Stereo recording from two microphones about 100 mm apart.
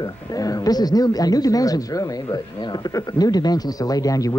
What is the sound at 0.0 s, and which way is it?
Speech, 40° left (ahead or behind).